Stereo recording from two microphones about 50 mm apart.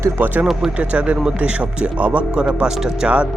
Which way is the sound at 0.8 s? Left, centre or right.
Right.